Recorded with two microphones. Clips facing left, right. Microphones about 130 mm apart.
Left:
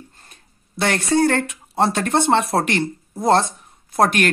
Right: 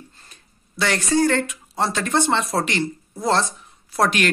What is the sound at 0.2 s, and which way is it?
Speech, 55° left (ahead or behind).